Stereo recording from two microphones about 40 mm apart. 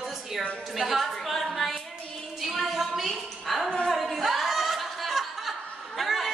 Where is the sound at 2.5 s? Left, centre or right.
Centre.